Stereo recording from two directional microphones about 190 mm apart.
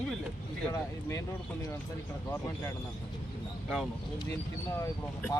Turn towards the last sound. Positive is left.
turn(degrees=15)  # may be behind; listen again after turning